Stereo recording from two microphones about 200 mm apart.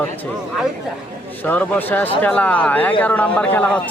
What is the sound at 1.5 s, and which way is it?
Speech, 10° left (ahead or behind).